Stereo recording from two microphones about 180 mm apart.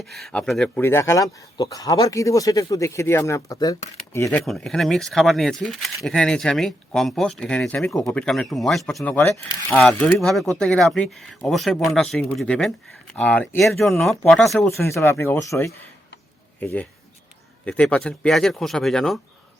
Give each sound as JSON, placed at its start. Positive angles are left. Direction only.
{"t": 0.0, "sound": "speech", "side_deg": 0}
{"t": 4.3, "sound": "speech", "side_deg": 0}
{"t": 9.7, "sound": "speech", "side_deg": 5}
{"t": 14.7, "sound": "speech", "side_deg": 15}